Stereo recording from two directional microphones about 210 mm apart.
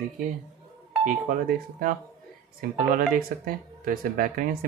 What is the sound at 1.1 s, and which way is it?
Speech, 40° right (ahead or behind).